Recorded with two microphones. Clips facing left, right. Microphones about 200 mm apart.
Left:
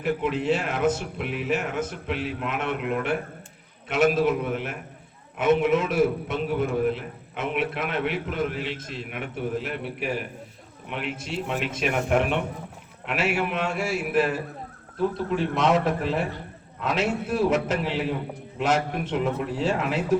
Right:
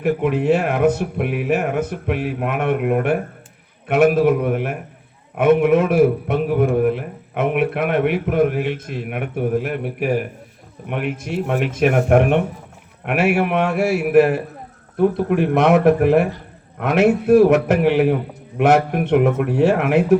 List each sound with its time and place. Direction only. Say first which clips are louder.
0.0 s a man's voice: right 7 dB; 60° right (ahead or behind)